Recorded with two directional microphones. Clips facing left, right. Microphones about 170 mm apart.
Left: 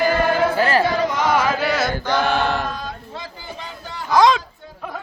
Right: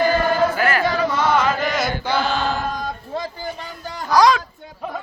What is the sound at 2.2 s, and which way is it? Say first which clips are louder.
Chant: left 2 dB; 65° left (ahead or behind).